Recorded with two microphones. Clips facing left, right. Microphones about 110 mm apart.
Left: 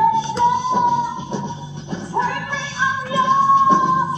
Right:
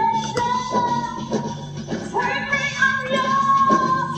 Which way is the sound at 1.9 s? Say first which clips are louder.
Left 1 dB; 25° left (ahead or behind).